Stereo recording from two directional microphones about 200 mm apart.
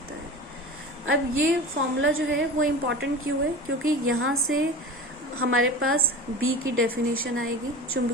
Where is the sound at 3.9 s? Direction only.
90° right.